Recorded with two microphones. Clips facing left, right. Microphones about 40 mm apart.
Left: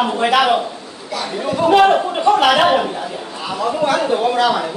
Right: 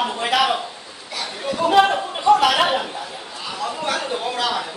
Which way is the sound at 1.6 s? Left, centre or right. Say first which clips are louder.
Left 4 dB; left.